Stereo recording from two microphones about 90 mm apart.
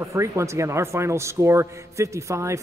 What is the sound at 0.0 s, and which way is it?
A man's voice, 30° right (ahead or behind).